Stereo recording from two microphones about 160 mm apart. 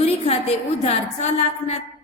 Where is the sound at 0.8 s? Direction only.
45° left (ahead or behind).